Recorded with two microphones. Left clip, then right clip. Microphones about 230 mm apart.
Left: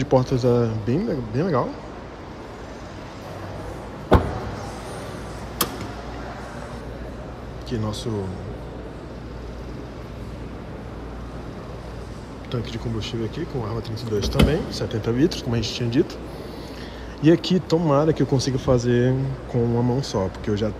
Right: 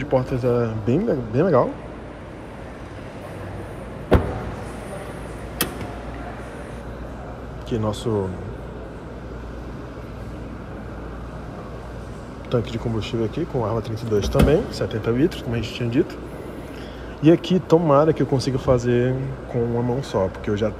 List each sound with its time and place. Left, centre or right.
0.0 s speech: centre
7.7 s speech: centre
12.4 s speech: centre
15.1 s speech: left
15.7 s speech: centre
17.2 s speech: centre